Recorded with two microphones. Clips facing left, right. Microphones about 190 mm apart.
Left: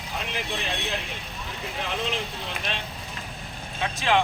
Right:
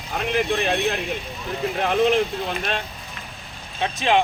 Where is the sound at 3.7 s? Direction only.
25° right (ahead or behind).